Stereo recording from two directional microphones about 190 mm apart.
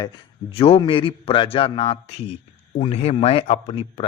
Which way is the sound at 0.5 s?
30° left (ahead or behind).